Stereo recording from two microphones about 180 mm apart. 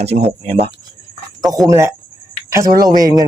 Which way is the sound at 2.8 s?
20° right (ahead or behind).